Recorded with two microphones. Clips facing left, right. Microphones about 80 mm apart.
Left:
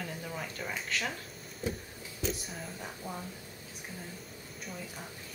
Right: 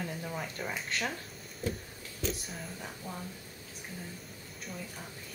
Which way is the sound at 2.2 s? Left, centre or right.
Centre.